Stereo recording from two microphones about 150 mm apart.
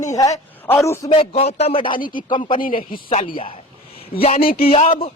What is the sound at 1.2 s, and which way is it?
Speech, 40° left (ahead or behind).